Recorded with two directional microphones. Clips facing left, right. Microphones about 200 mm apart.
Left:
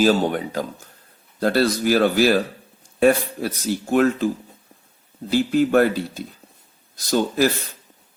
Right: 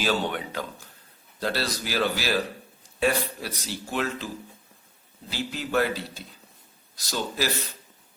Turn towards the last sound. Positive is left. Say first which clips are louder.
# left 10 dB
turn(degrees=50)  # may be behind; listen again after turning